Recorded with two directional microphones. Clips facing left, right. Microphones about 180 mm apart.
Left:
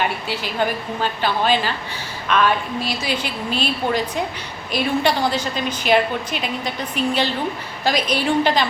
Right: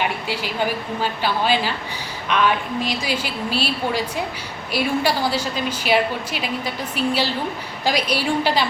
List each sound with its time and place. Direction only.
0.3 s a woman's voice: 10° right (ahead or behind)